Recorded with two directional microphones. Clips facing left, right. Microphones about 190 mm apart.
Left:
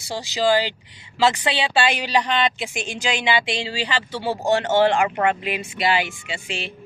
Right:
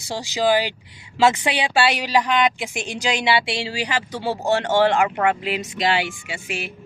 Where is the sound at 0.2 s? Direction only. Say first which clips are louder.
Even; 15° right (ahead or behind).